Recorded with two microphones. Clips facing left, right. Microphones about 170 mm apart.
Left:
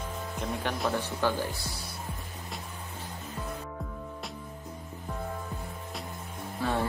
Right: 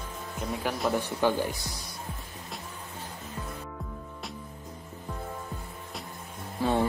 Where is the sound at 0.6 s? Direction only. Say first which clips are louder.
Right 3 dB; 5° right (ahead or behind).